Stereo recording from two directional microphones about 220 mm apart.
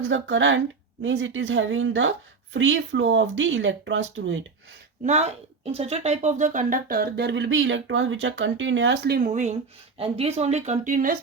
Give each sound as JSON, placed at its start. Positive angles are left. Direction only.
{"t": 0.1, "sound": "a woman's voice", "side_deg": -60}
{"t": 5.0, "sound": "speech", "side_deg": -30}